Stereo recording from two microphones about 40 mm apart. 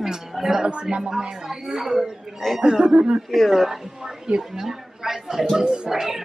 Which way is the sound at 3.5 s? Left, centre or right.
Centre.